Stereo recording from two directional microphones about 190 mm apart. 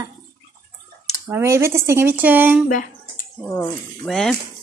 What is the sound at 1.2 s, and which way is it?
Speech, 15° right (ahead or behind).